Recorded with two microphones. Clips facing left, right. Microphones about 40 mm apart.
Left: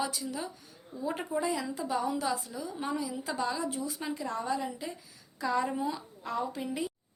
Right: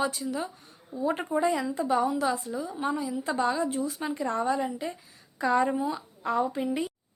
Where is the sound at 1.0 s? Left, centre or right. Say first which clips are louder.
Right 6 dB; right.